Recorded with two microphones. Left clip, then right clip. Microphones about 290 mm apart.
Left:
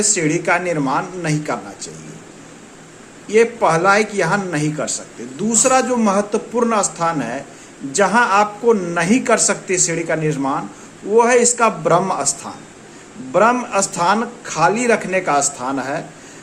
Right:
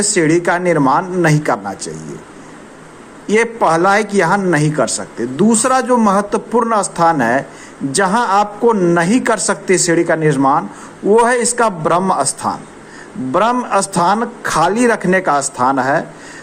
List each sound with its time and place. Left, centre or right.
0.0 s a man's voice: right
3.2 s a man's voice: right